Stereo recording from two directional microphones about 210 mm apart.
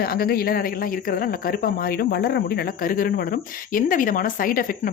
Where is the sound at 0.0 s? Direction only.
45° left (ahead or behind).